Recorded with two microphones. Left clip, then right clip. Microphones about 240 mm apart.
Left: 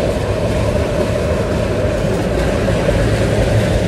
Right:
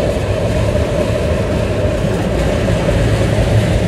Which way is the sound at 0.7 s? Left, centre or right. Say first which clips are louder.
Right 1 dB; centre.